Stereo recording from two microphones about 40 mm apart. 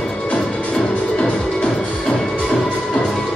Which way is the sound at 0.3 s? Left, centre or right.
Left.